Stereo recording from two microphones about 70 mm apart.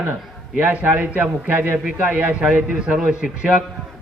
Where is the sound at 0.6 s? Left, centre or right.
Right.